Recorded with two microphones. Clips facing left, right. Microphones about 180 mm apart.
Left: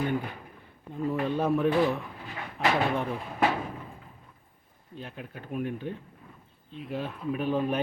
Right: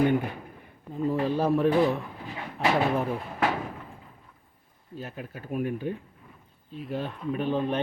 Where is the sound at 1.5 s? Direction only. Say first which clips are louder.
Right 2 dB; centre (ahead or behind).